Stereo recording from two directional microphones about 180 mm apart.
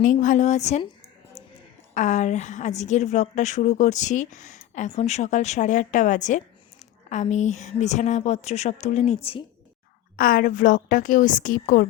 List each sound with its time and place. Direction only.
0.0 s a woman's voice: 45° left (ahead or behind)
1.9 s a woman's voice: 40° left (ahead or behind)
10.2 s a woman's voice: 50° left (ahead or behind)